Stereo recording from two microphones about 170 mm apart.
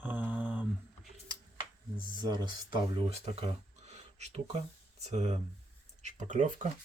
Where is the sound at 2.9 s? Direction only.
35° right (ahead or behind).